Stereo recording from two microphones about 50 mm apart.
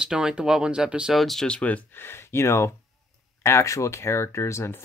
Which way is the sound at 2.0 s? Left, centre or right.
Left.